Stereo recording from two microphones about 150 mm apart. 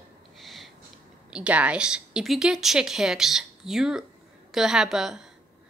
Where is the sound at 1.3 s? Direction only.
10° right (ahead or behind).